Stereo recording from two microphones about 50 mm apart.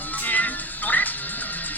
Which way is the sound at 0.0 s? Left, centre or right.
Left.